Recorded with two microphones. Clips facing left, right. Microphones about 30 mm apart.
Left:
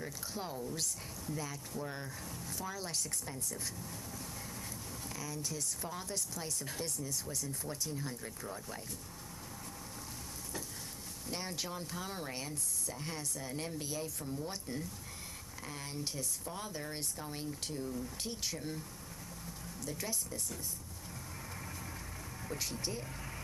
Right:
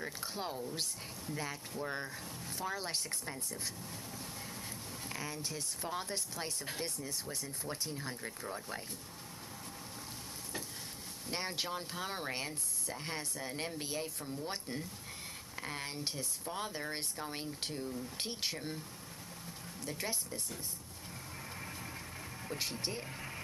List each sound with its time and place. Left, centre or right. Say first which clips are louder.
0.0 s speech: right 2 dB; right
5.1 s speech: right 1 dB; right
11.2 s speech: right 3 dB; right
19.9 s speech: right 1 dB; right
22.6 s speech: right 2 dB; right